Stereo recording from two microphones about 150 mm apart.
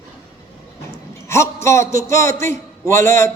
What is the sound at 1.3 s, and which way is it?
A man's voice, 20° left (ahead or behind).